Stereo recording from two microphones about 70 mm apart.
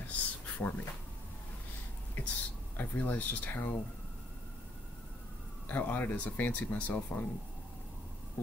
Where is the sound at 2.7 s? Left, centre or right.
Left.